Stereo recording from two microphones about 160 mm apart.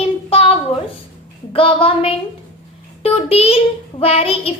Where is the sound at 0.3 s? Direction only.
35° left (ahead or behind).